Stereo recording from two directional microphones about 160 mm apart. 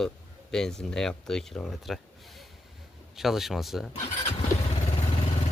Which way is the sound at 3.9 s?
45° left (ahead or behind).